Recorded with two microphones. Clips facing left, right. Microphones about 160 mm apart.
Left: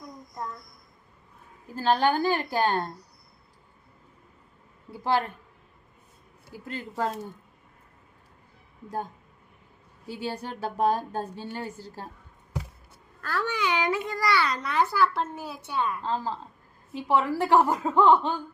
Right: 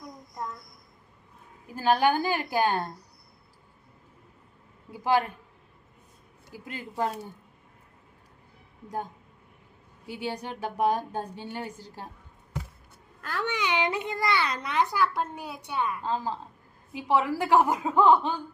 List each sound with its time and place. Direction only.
1.6 s a woman's voice: 10° right (ahead or behind)
4.9 s a woman's voice: 15° right (ahead or behind)
6.5 s a woman's voice: 15° right (ahead or behind)
10.1 s a woman's voice: 15° right (ahead or behind)
13.2 s a child's voice: 20° right (ahead or behind)